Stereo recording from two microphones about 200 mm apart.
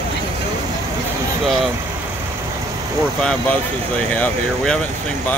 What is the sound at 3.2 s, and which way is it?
Speech, 5° left (ahead or behind).